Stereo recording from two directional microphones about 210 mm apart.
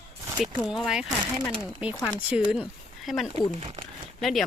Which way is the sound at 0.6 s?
5° right (ahead or behind).